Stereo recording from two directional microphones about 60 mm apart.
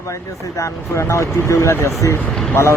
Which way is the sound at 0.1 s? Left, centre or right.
Left.